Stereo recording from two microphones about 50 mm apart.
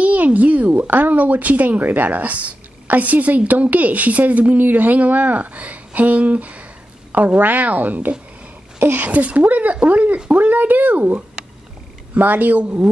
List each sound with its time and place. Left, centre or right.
0.0 s speech: right